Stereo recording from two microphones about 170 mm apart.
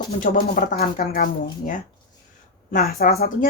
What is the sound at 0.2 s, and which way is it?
Speech, 50° left (ahead or behind).